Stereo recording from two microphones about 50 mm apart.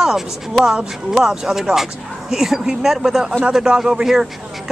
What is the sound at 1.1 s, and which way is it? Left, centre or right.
Speech, centre.